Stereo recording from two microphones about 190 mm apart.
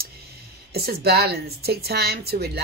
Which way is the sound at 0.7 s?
55° right (ahead or behind).